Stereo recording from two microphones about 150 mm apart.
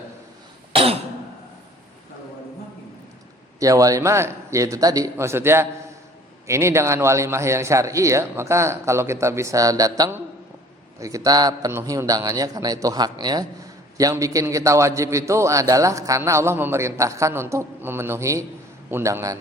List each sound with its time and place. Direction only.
0.7 s cough: 40° right (ahead or behind)
3.6 s a man's voice: 20° right (ahead or behind)